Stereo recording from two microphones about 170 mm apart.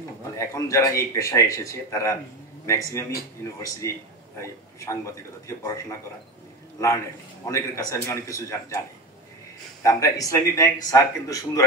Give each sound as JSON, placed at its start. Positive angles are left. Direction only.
{"t": 0.4, "sound": "a man's voice", "side_deg": 20}
{"t": 7.4, "sound": "a man's voice", "side_deg": 20}
{"t": 9.8, "sound": "speech", "side_deg": 20}